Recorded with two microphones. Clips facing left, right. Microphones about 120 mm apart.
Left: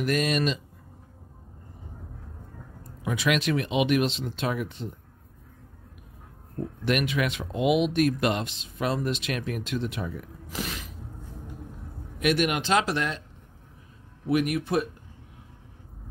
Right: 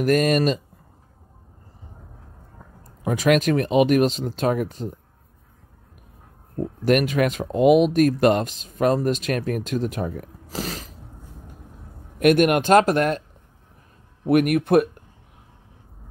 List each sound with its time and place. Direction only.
0.0 s speech: 45° right (ahead or behind)
2.8 s speech: 45° right (ahead or behind)
6.8 s speech: 45° right (ahead or behind)
12.2 s speech: 50° right (ahead or behind)
14.2 s speech: 55° right (ahead or behind)